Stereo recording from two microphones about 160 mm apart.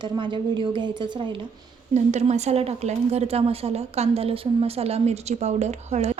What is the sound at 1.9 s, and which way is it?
A woman's voice, 45° right (ahead or behind).